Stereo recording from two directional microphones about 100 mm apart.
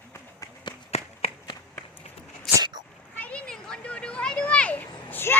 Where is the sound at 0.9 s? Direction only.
90° left.